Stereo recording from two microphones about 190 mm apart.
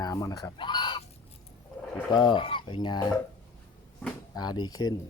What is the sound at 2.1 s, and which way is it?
Speech, 25° left (ahead or behind).